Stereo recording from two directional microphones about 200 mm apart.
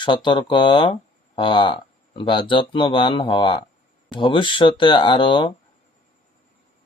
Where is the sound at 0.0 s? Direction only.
25° left (ahead or behind).